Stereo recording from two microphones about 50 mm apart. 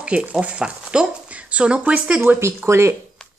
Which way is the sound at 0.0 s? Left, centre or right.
Right.